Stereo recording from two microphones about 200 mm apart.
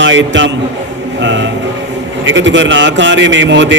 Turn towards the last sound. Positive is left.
turn(degrees=-65)  # may be behind; listen again after turning